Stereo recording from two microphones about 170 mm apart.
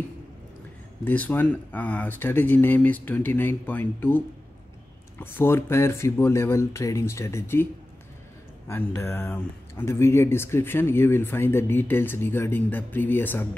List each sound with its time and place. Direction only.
1.0 s speech: 10° left (ahead or behind)
5.2 s speech: 15° left (ahead or behind)
8.6 s speech: 15° left (ahead or behind)